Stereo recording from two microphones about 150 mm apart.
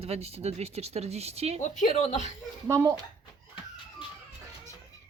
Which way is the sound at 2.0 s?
50° left (ahead or behind).